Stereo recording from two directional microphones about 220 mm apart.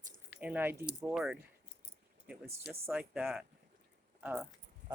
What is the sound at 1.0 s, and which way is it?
Speech, 5° right (ahead or behind).